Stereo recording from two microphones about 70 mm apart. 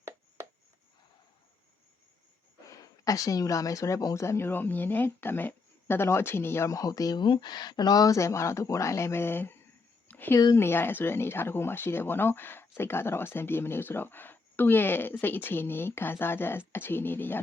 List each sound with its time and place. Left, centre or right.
2.6 s speech: left
6.7 s speech: left
10.1 s a sound: left
10.6 s speech: left